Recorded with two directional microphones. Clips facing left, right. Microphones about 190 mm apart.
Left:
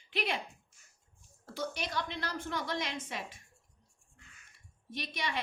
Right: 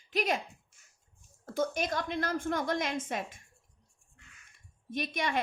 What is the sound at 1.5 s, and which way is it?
A woman's voice, 50° right (ahead or behind).